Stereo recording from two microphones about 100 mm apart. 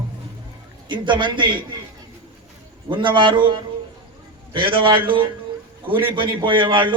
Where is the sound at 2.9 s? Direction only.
55° right (ahead or behind).